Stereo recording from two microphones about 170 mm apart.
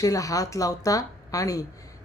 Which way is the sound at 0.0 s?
20° left (ahead or behind).